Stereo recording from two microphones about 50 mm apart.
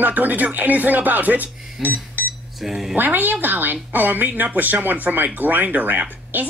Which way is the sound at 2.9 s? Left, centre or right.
Right.